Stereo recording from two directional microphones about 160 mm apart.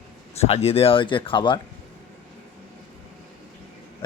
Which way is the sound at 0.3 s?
40° left (ahead or behind).